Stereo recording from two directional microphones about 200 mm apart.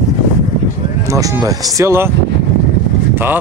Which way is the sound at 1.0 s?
15° right (ahead or behind).